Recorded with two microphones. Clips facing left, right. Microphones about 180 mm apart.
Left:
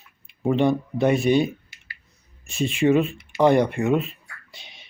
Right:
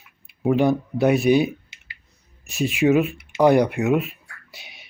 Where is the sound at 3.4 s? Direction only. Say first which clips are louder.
Right 1 dB; 5° right (ahead or behind).